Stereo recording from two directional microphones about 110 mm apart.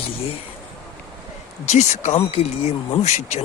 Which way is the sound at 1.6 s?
90° left.